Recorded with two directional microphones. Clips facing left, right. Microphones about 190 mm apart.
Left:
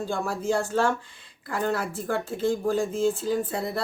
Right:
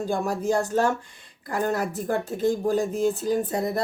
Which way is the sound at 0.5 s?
40° right (ahead or behind).